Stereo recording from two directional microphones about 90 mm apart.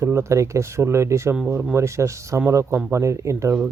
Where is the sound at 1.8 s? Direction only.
35° right (ahead or behind).